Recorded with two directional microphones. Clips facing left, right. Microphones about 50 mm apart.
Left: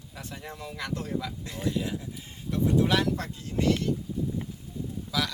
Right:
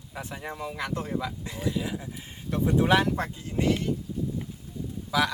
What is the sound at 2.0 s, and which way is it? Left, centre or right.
Speech, right.